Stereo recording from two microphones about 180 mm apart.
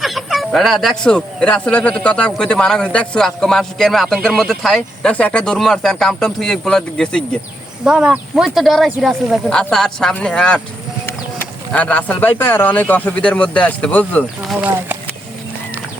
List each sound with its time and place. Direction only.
0.0 s speech: centre (ahead or behind)